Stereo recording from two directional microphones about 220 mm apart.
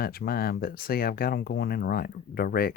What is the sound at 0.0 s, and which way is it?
Speech, 45° left (ahead or behind).